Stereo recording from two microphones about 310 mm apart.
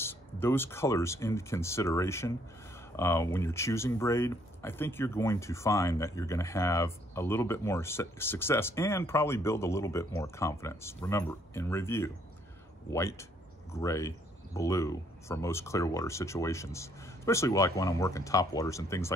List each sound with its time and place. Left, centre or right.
0.0 s speech: centre